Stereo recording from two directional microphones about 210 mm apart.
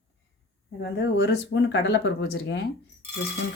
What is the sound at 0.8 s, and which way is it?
Speech, 55° left (ahead or behind).